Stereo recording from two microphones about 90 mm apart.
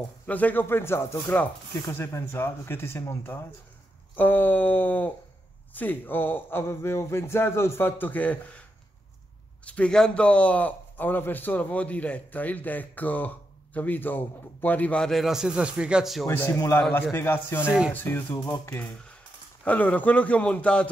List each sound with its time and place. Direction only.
0.3 s a man's voice: 20° left (ahead or behind)
9.7 s a man's voice: 10° left (ahead or behind)
15.0 s speech: centre (ahead or behind)
16.3 s a man's voice: 35° left (ahead or behind)
18.4 s speech: 45° left (ahead or behind)
19.6 s a man's voice: 15° left (ahead or behind)